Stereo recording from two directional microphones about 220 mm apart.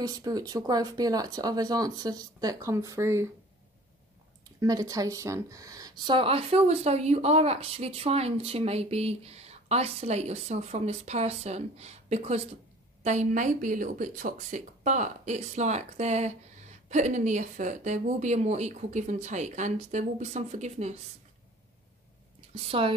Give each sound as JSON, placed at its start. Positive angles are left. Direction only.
{"t": 0.0, "sound": "speech", "side_deg": -15}
{"t": 4.6, "sound": "speech", "side_deg": -15}
{"t": 22.5, "sound": "a woman's voice", "side_deg": -25}